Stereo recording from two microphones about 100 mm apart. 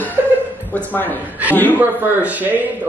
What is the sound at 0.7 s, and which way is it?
A woman's voice, 15° left (ahead or behind).